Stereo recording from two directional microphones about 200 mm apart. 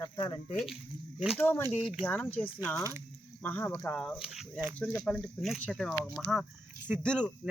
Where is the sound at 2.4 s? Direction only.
25° left (ahead or behind).